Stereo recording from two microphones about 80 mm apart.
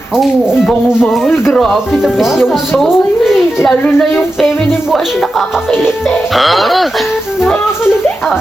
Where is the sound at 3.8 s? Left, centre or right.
Centre.